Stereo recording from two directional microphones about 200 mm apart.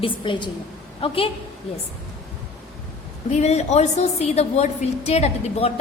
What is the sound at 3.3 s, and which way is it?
A woman's voice, 35° left (ahead or behind).